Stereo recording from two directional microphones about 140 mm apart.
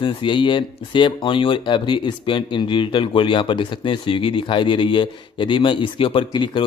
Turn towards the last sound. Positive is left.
turn(degrees=35)  # may be behind; listen again after turning